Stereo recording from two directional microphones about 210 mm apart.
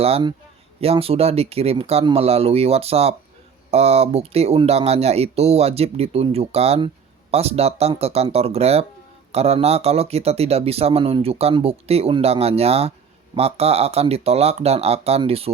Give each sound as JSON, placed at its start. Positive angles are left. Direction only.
{"t": 0.0, "sound": "speech", "side_deg": -25}